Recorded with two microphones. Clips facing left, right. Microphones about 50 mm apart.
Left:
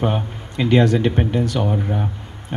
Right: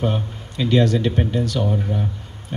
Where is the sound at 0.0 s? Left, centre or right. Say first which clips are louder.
Left 2 dB; left.